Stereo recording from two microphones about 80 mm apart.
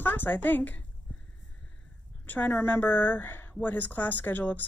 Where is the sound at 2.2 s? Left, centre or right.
Left.